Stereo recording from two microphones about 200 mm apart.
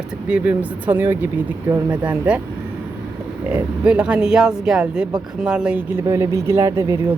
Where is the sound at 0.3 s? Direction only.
5° right (ahead or behind).